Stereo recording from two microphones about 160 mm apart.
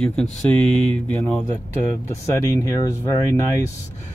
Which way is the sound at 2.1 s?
20° left (ahead or behind).